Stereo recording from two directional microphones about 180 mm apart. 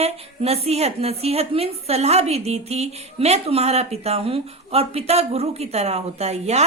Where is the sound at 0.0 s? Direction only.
35° right (ahead or behind).